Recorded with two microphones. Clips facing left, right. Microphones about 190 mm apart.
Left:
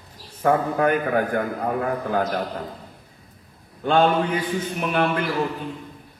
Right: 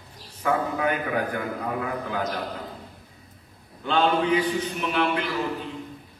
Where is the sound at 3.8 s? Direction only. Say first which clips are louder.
Left 3 dB; 50° left (ahead or behind).